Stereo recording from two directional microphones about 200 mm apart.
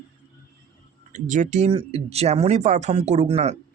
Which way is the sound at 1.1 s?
40° right (ahead or behind).